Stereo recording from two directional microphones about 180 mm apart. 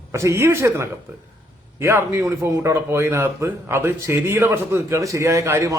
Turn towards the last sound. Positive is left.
turn(degrees=-15)  # may be behind; listen again after turning